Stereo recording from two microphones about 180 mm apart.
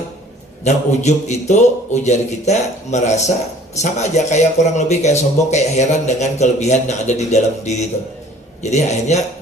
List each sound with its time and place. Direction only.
0.6 s speech: 40° left (ahead or behind)